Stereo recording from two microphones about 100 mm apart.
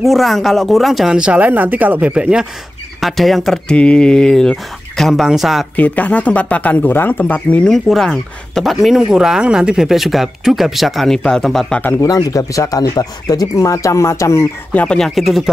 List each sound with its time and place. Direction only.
0.0 s speech: centre (ahead or behind)
3.0 s speech: centre (ahead or behind)
5.8 s speech: 15° left (ahead or behind)
7.7 s speech: 5° left (ahead or behind)
12.0 s speech: 35° left (ahead or behind)
14.7 s speech: 15° left (ahead or behind)
15.0 s speech: centre (ahead or behind)